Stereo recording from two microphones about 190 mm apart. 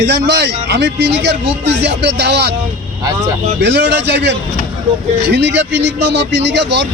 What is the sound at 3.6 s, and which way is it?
A man's voice, 65° right (ahead or behind).